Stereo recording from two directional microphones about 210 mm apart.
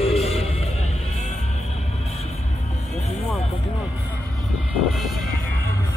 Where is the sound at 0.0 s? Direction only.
30° left (ahead or behind).